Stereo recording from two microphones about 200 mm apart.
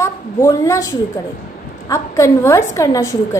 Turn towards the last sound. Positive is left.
turn(degrees=15)  # may be behind; listen again after turning